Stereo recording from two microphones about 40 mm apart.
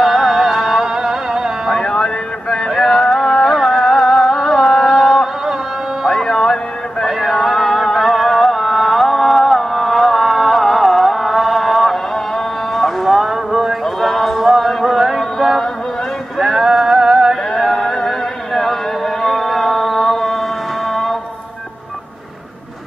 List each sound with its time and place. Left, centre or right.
0.0 s music: centre
1.7 s music: centre
6.2 s a sound: centre
7.1 s music: centre
13.8 s a sound: centre
17.6 s music: centre